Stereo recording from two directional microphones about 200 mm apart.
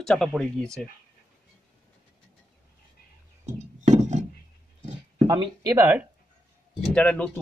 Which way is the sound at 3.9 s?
35° right (ahead or behind).